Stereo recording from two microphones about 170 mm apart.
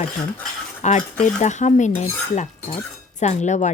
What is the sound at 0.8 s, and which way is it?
Cutlery, 45° left (ahead or behind).